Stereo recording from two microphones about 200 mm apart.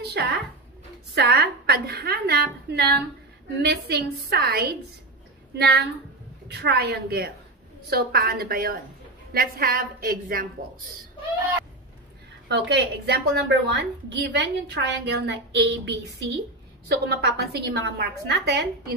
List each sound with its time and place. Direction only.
0.1 s a woman's voice: 55° right (ahead or behind)
12.4 s a woman's voice: 60° right (ahead or behind)